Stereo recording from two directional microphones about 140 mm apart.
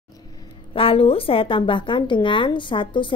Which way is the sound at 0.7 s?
40° left (ahead or behind).